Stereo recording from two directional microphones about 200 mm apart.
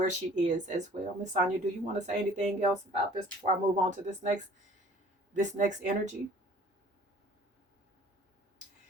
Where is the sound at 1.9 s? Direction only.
35° right (ahead or behind).